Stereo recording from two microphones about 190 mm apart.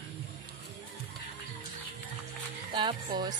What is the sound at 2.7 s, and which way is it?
Speech, 25° right (ahead or behind).